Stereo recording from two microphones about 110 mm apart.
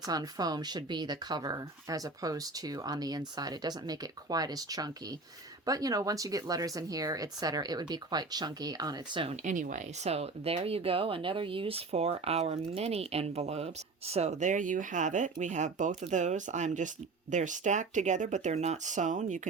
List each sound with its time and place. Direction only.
0.0 s speech: 35° right (ahead or behind)
9.2 s speech: 85° right